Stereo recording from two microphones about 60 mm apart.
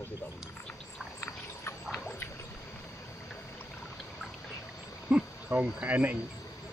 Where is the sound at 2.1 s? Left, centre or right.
Left.